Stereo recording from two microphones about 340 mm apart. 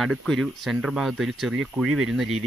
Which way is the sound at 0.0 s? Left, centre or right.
Centre.